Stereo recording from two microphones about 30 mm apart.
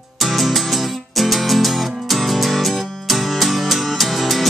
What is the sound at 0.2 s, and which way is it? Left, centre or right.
Music, centre.